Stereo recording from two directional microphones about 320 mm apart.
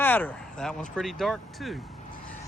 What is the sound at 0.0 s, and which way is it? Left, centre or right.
Speech, centre.